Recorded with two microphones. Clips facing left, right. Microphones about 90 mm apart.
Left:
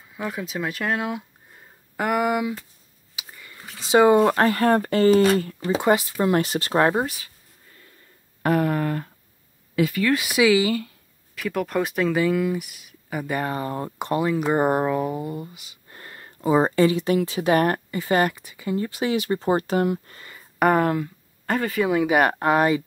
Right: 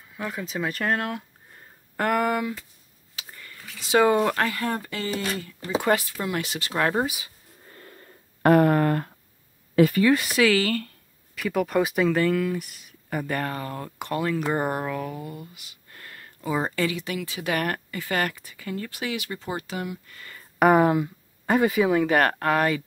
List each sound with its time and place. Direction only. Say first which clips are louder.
0.1 s speech: left 2 dB; 15° left (ahead or behind)
3.2 s a sound: left 1 dB; 10° left (ahead or behind)
3.6 s speech: left 4 dB; 35° left (ahead or behind)
3.9 s speech: left 4 dB; 20° left (ahead or behind)
4.4 s speech: left 7 dB; 45° left (ahead or behind)
5.7 s speech: left 3 dB; 20° left (ahead or behind)
6.2 s speech: left 8 dB; 40° left (ahead or behind)
7.7 s a sound: right 7 dB; 50° right (ahead or behind)
9.8 s speech: right 4 dB; 45° right (ahead or behind)
10.1 s speech: left 2 dB; 10° left (ahead or behind)
13.4 s speech: left 4 dB; 20° left (ahead or behind); by 20.2 s 45° left (ahead or behind)
20.5 s speech: right 1 dB; 5° right (ahead or behind)
20.8 s speech: right 2 dB; 15° right (ahead or behind)
21.8 s speech: left 1 dB; 5° left (ahead or behind)